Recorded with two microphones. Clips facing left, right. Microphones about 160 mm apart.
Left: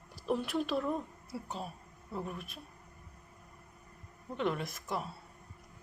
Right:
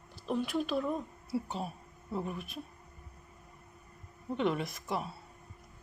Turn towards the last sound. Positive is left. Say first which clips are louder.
# right 2 dB
turn(degrees=0)  # may be behind; listen again after turning